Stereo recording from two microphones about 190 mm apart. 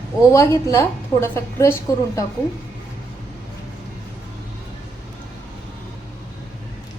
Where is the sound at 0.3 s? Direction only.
15° left (ahead or behind).